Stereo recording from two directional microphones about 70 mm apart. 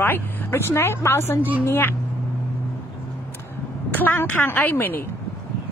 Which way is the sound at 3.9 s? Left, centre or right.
Left.